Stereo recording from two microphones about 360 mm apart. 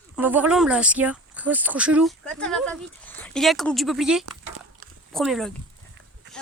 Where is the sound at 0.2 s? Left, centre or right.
Centre.